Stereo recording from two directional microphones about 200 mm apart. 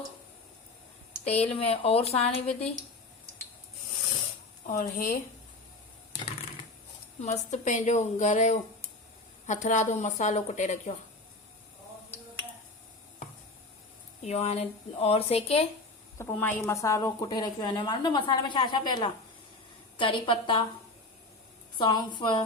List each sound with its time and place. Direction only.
1.2 s a woman's voice: 30° left (ahead or behind)
4.6 s a woman's voice: 35° left (ahead or behind)
7.2 s a woman's voice: 35° left (ahead or behind)
14.3 s a woman's voice: 30° left (ahead or behind)
16.1 s a woman's voice: 10° left (ahead or behind)
21.8 s a woman's voice: 20° left (ahead or behind)